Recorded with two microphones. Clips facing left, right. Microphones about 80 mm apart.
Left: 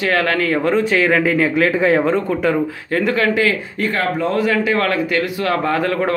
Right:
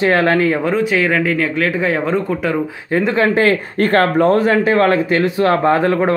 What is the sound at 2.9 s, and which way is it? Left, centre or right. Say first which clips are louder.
Speech: right 2 dB; right.